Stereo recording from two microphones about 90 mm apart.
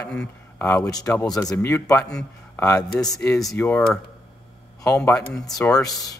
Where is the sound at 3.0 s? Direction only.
40° left (ahead or behind).